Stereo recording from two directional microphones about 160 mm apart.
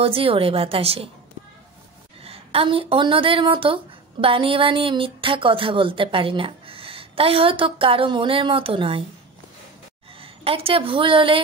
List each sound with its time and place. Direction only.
0.0 s a woman's voice: 35° right (ahead or behind)
2.2 s a woman's voice: 35° right (ahead or behind)
10.2 s a woman's voice: 35° right (ahead or behind)